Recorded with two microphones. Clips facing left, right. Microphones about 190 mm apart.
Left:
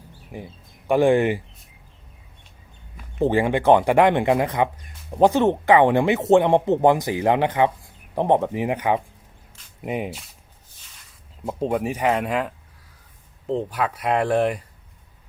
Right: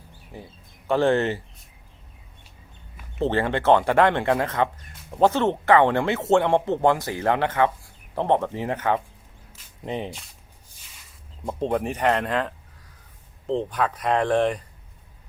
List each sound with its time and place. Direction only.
0.3 s speech: 15° left (ahead or behind)
3.2 s speech: 10° left (ahead or behind)
11.4 s speech: 5° left (ahead or behind)